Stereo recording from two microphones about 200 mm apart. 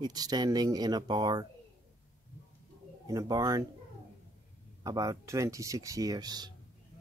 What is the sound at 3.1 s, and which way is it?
Speech, 15° right (ahead or behind).